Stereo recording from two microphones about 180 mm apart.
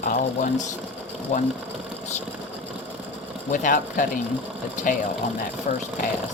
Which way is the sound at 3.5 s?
45° left (ahead or behind).